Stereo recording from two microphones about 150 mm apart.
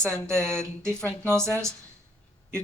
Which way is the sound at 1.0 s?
15° right (ahead or behind).